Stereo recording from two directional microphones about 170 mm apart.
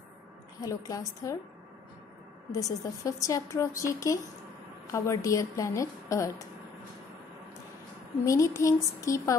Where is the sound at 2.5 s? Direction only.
20° left (ahead or behind).